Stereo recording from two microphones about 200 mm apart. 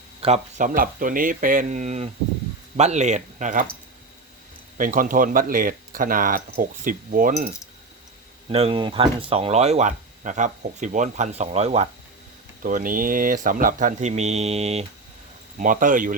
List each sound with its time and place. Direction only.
0.2 s speech: 35° right (ahead or behind)
4.8 s speech: 45° right (ahead or behind)
8.4 s speech: 25° right (ahead or behind)
12.6 s speech: 45° right (ahead or behind)